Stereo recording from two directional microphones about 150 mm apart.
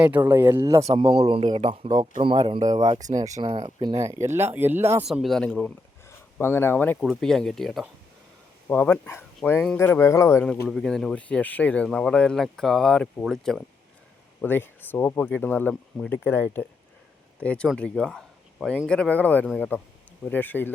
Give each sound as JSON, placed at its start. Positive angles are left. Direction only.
{"t": 0.3, "sound": "speech", "side_deg": -15}
{"t": 0.9, "sound": "speech", "side_deg": -35}
{"t": 2.6, "sound": "speech", "side_deg": -25}
{"t": 3.3, "sound": "speech", "side_deg": -40}
{"t": 5.0, "sound": "speech", "side_deg": 0}
{"t": 6.1, "sound": "speech", "side_deg": 15}
{"t": 10.7, "sound": "speech", "side_deg": 5}
{"t": 14.4, "sound": "speech", "side_deg": 15}